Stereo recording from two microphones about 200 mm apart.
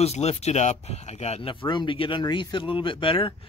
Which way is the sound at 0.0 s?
30° left (ahead or behind).